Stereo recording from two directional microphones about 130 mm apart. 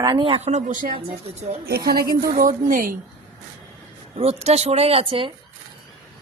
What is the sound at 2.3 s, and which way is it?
Speech, 90° right.